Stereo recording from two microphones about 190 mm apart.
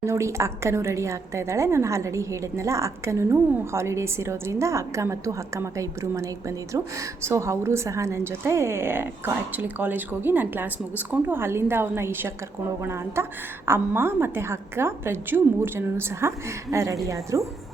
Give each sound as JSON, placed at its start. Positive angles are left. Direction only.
{"t": 0.0, "sound": "a woman's voice", "side_deg": -15}